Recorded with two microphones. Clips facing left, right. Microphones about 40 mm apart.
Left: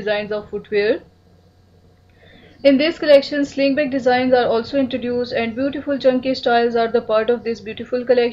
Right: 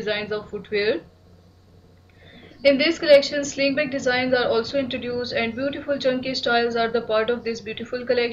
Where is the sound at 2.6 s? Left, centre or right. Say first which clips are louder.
Left 4 dB; centre.